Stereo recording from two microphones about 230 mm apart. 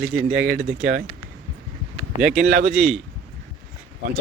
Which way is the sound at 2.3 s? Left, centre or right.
Right.